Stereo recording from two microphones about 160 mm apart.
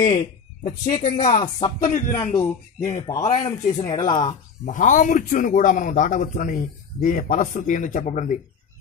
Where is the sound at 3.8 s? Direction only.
25° left (ahead or behind).